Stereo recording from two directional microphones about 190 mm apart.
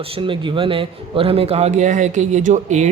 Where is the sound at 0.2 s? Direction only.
25° right (ahead or behind).